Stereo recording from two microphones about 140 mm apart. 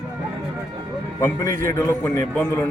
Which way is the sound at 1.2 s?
20° left (ahead or behind).